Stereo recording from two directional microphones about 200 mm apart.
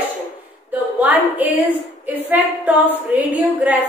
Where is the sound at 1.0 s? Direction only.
10° right (ahead or behind).